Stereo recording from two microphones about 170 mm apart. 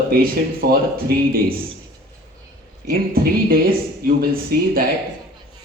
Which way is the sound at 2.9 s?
60° right (ahead or behind).